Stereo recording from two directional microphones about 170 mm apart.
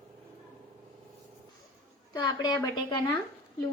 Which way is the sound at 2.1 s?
25° left (ahead or behind).